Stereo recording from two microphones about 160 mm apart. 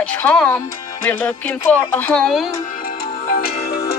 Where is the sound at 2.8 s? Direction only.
65° left (ahead or behind).